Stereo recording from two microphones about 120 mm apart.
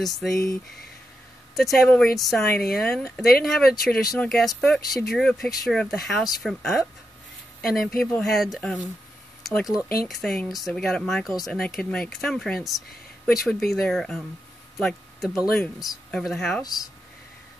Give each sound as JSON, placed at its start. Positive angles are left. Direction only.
{"t": 0.0, "sound": "speech", "side_deg": 0}
{"t": 1.5, "sound": "speech", "side_deg": 0}
{"t": 10.0, "sound": "speech", "side_deg": 5}
{"t": 16.6, "sound": "speech", "side_deg": 30}